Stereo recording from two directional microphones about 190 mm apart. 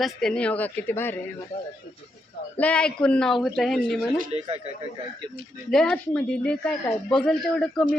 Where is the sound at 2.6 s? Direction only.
5° left (ahead or behind).